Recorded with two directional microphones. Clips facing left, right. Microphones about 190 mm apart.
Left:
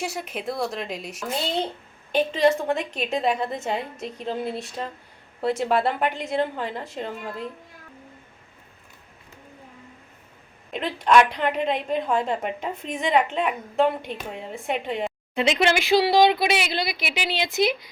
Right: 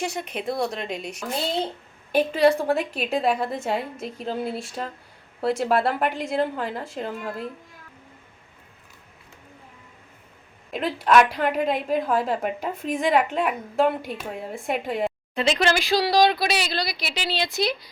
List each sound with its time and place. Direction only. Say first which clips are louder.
0.0 s a woman's voice: right 1 dB; 5° left (ahead or behind)
10.7 s a woman's voice: even; 5° right (ahead or behind)
15.4 s speech: left 1 dB; 20° left (ahead or behind)